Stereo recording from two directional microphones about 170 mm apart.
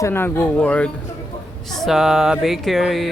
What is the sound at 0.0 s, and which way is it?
Speech, 15° left (ahead or behind).